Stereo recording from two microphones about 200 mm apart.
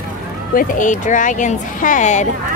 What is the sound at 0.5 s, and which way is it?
Speech, 40° left (ahead or behind).